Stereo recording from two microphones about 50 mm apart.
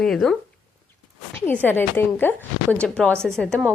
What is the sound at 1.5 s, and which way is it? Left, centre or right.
Speech, left.